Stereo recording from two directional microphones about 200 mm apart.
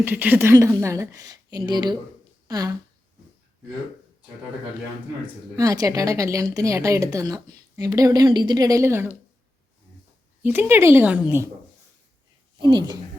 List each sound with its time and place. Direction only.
0.0 s speech: 10° right (ahead or behind)
5.2 s speech: 15° right (ahead or behind)
10.4 s speech: 10° right (ahead or behind)
12.5 s speech: 20° right (ahead or behind)